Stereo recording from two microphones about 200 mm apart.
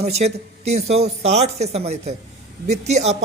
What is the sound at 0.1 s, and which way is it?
Speech, 35° right (ahead or behind).